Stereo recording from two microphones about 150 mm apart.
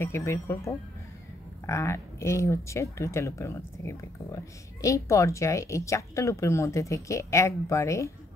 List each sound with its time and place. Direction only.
0.0 s speech: 15° left (ahead or behind)